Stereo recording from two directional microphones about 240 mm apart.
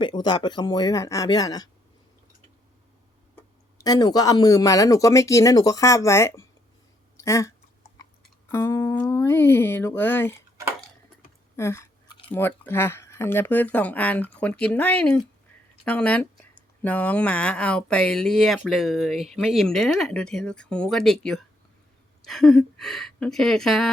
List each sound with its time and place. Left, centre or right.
0.0 s speech: centre
3.3 s speech: centre
8.5 s speech: centre
11.5 s a sound: centre
12.3 s speech: centre